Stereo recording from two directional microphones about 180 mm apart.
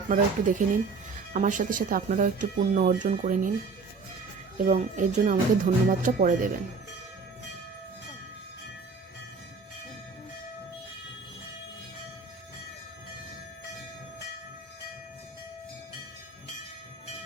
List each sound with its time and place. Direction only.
0.1 s speech: 45° right (ahead or behind)
4.5 s speech: 45° right (ahead or behind)